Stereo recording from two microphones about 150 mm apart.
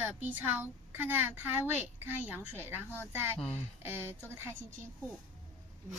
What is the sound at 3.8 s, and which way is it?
Speech, 15° right (ahead or behind).